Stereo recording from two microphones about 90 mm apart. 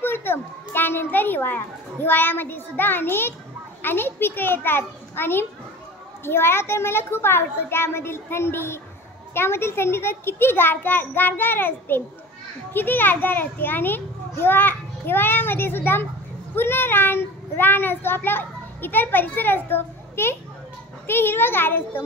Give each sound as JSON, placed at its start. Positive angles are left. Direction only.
{"t": 0.0, "sound": "a child's voice", "side_deg": 25}